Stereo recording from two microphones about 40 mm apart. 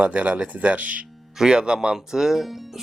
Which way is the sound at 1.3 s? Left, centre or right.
Centre.